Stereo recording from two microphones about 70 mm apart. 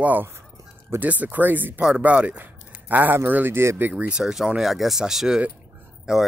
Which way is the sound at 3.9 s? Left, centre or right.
Centre.